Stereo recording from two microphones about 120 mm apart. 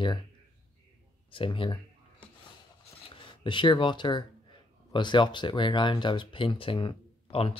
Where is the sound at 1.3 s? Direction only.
45° left (ahead or behind).